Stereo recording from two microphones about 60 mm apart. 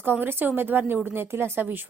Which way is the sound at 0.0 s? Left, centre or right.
Right.